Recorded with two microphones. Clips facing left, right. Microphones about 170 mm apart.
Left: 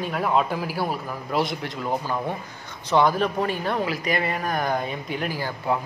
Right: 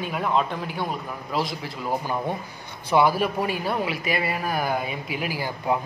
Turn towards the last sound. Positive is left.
turn(degrees=-10)  # may be behind; listen again after turning